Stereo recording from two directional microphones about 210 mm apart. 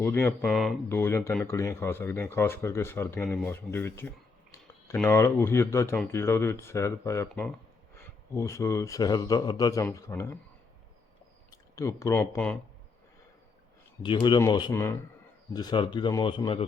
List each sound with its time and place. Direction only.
0.0 s speech: 10° left (ahead or behind)
0.4 s speech: centre (ahead or behind)
0.9 s speech: 10° left (ahead or behind)
11.5 s speech: 15° left (ahead or behind)
14.0 s speech: 20° left (ahead or behind)